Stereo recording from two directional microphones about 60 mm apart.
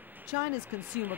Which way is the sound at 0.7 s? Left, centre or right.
Right.